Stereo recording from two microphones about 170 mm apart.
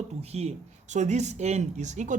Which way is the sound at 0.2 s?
40° right (ahead or behind).